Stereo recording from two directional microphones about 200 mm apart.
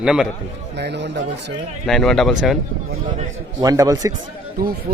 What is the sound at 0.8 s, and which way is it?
Speech, 60° right (ahead or behind).